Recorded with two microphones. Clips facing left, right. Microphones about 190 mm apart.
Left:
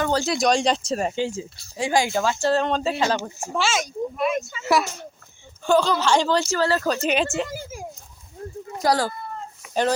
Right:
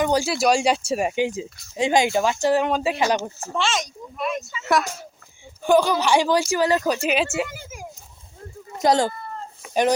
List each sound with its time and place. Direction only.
0.0 s speech: 10° right (ahead or behind)
3.3 s speech: 15° left (ahead or behind)
3.6 s speech: 5° left (ahead or behind)
5.6 s speech: 15° right (ahead or behind)
7.5 s a child's voice: 30° left (ahead or behind)
8.8 s speech: 20° right (ahead or behind)
9.6 s a sound: 30° right (ahead or behind)